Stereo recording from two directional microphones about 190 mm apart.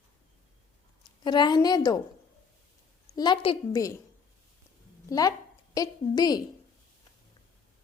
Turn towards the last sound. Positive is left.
turn(degrees=20)  # may be behind; listen again after turning